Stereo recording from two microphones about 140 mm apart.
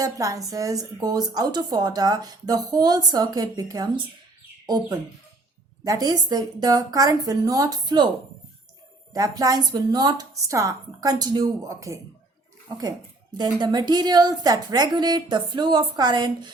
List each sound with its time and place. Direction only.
0.0 s a woman's voice: 25° right (ahead or behind)
9.1 s a woman's voice: 25° right (ahead or behind)
13.3 s a woman's voice: 30° right (ahead or behind)